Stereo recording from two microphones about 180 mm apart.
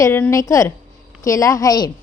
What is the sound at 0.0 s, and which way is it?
A woman's voice, 15° left (ahead or behind).